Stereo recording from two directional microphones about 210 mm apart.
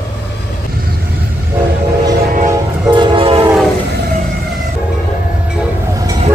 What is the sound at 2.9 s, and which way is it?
Train, 20° right (ahead or behind).